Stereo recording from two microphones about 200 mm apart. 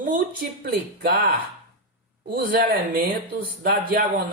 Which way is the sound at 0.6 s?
50° right (ahead or behind).